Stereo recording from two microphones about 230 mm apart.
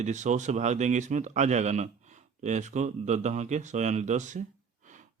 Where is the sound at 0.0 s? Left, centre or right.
Right.